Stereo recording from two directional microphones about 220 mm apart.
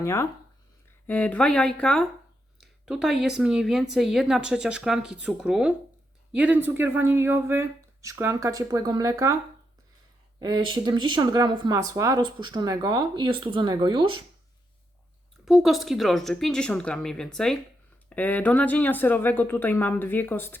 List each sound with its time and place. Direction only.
0.0 s a woman's voice: 15° left (ahead or behind); by 9.4 s 15° right (ahead or behind)
10.4 s speech: 20° right (ahead or behind)
15.4 s a woman's voice: centre (ahead or behind)